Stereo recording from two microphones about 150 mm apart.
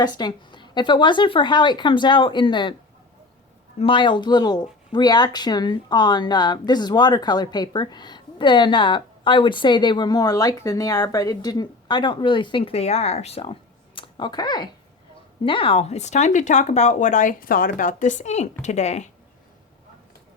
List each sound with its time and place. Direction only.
0.0 s a woman's voice: 30° left (ahead or behind)
3.8 s speech: 35° left (ahead or behind)